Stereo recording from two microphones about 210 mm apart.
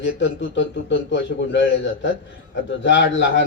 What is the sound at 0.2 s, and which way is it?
A man's voice, 60° left (ahead or behind).